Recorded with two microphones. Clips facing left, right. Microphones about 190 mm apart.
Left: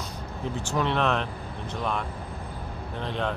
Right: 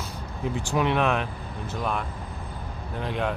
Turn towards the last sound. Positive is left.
turn(degrees=-10)  # may be behind; listen again after turning